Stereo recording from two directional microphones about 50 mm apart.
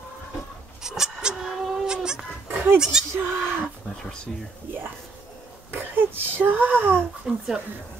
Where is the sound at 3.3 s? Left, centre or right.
Right.